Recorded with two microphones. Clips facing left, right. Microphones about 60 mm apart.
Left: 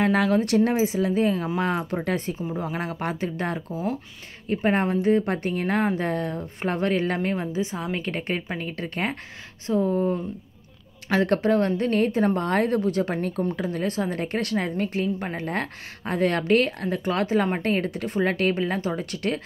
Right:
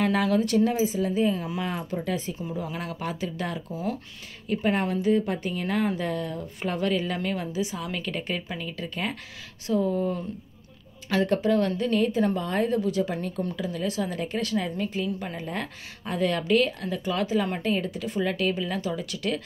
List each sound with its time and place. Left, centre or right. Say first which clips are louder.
0.0 s a woman's voice: left 3 dB; left
0.4 s a woman's voice: left 2 dB; left
2.3 s a woman's voice: left 3 dB; left
3.7 s a woman's voice: left 2 dB; left
7.2 s a woman's voice: left 3 dB; left
11.2 s a woman's voice: left 2 dB; left
12.4 s a woman's voice: left 3 dB; left